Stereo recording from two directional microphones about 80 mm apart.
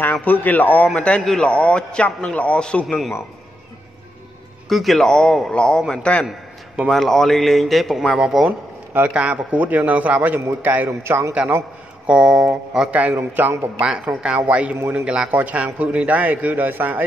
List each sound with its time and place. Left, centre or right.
0.0 s a man's voice: left
4.6 s a man's voice: centre
6.8 s speech: centre
8.5 s a man's voice: centre
10.9 s a man's voice: right
12.1 s speech: centre
12.9 s a man's voice: centre
13.7 s a man's voice: centre; by 17.0 s right